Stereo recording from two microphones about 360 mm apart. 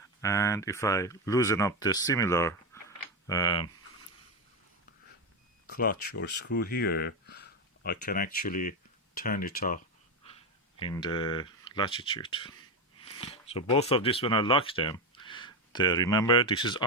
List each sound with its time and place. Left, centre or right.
0.2 s speech: centre
5.7 s speech: left
10.8 s speech: centre